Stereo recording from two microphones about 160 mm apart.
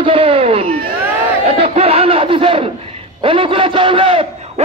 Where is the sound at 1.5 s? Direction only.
35° right (ahead or behind).